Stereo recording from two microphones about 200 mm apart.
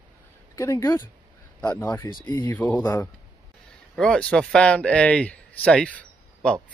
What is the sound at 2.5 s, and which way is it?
Speech, 10° left (ahead or behind).